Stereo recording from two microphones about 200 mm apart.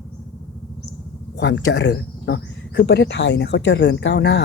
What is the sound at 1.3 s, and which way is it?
Speech, 60° left (ahead or behind).